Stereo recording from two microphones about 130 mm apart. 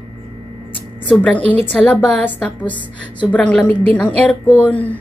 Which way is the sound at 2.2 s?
10° left (ahead or behind).